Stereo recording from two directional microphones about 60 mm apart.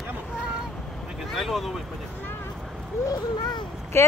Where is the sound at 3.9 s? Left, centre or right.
Left.